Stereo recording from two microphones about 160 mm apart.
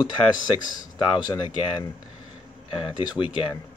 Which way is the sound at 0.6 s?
25° left (ahead or behind).